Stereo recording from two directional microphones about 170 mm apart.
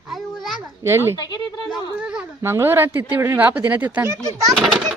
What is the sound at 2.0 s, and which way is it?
Speech, 5° right (ahead or behind).